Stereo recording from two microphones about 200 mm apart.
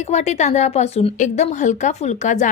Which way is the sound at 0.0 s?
35° left (ahead or behind).